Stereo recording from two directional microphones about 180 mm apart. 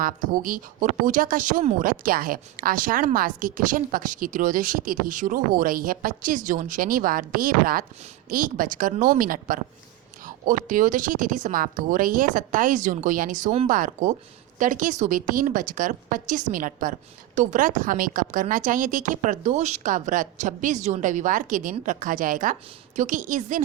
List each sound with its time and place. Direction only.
0.0 s speech: 50° right (ahead or behind)